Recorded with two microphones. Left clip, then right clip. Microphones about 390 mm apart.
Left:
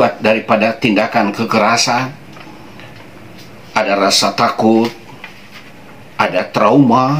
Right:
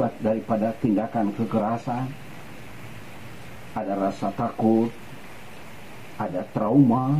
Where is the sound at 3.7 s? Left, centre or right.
Centre.